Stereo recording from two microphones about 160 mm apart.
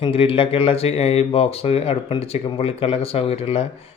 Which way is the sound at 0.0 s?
35° left (ahead or behind).